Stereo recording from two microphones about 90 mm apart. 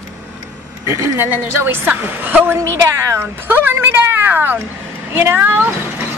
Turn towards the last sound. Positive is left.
turn(degrees=-20)  # may be behind; listen again after turning